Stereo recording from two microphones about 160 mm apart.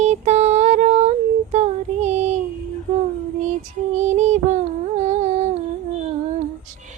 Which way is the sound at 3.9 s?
45° right (ahead or behind).